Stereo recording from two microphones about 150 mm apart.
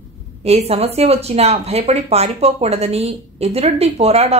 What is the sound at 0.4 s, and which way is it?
A woman's voice, 45° right (ahead or behind).